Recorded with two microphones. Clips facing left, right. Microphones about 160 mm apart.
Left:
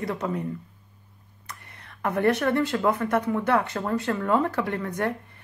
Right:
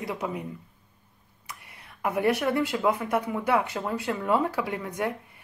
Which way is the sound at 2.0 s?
10° right (ahead or behind).